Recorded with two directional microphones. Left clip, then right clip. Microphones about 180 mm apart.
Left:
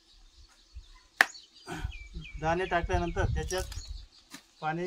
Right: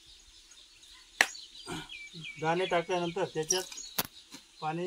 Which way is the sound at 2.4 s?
10° left (ahead or behind).